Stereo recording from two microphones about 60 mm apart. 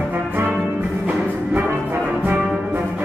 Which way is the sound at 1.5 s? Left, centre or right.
Right.